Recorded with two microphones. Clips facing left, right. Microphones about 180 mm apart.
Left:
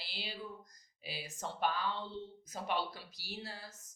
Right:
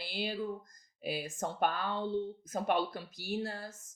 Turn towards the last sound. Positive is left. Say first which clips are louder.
# right 9 dB
turn(degrees=-50)  # may be behind; listen again after turning